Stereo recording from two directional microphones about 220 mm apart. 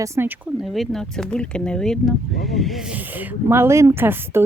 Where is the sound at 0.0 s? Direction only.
10° right (ahead or behind).